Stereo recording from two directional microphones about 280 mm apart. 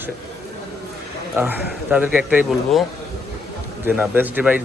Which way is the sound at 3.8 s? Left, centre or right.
Centre.